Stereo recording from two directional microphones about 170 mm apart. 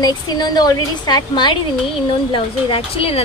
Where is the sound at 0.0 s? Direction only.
25° left (ahead or behind).